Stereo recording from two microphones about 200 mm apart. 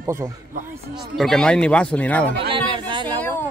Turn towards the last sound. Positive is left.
turn(degrees=-25)  # may be behind; listen again after turning